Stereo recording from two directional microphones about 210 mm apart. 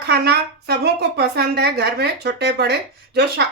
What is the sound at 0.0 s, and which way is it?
A woman's voice, 50° right (ahead or behind).